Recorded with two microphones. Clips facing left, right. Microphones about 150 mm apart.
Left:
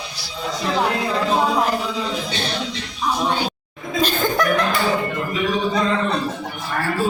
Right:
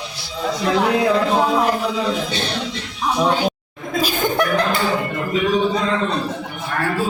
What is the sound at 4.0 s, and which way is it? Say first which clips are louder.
Laughter: even; 10° right (ahead or behind).